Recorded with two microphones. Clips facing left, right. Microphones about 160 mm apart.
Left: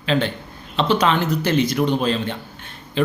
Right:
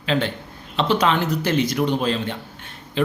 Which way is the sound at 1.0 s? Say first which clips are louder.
Left 1 dB; 10° right (ahead or behind).